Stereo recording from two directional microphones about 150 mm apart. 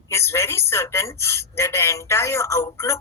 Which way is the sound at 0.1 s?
15° left (ahead or behind).